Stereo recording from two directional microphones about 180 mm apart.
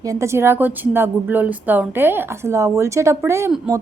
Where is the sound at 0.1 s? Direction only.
15° right (ahead or behind).